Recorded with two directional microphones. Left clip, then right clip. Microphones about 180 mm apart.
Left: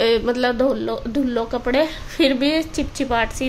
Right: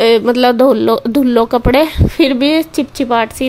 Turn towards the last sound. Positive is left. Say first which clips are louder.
# right 7 dB
turn(degrees=-35)  # may be behind; listen again after turning